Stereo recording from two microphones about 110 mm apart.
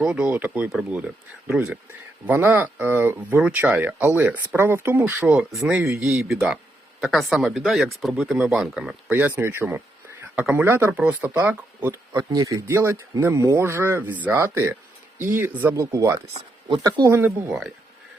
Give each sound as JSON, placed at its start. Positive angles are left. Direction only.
{"t": 0.0, "sound": "speech", "side_deg": -10}
{"t": 9.1, "sound": "speech", "side_deg": -15}
{"t": 12.1, "sound": "speech", "side_deg": -35}
{"t": 15.7, "sound": "speech", "side_deg": -30}
{"t": 16.3, "sound": "speech", "side_deg": -50}
{"t": 16.8, "sound": "speech", "side_deg": -30}